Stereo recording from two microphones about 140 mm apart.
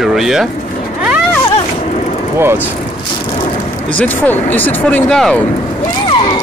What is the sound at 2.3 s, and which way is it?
Speech, 15° right (ahead or behind).